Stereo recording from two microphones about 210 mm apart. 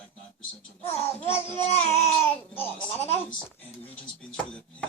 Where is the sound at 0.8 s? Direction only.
30° left (ahead or behind).